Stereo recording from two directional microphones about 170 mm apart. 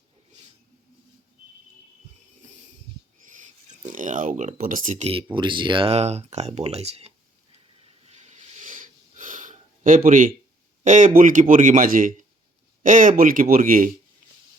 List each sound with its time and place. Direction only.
3.3 s speech: 45° right (ahead or behind)
8.0 s a sound: 40° right (ahead or behind)
10.8 s speech: 45° right (ahead or behind)